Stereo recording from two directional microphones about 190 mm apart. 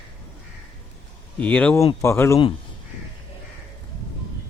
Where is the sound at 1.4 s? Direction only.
5° left (ahead or behind).